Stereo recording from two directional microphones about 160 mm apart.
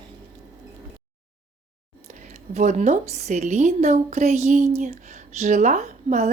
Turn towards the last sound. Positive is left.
turn(degrees=-45)  # may be behind; listen again after turning